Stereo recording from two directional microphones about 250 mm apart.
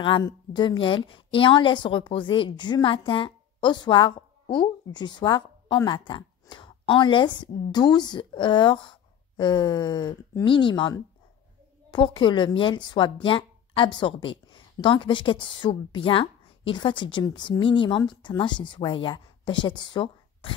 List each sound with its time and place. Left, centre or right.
0.0 s a woman's voice: centre